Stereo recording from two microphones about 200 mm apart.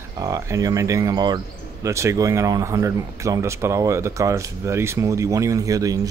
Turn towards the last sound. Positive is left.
turn(degrees=-15)  # may be behind; listen again after turning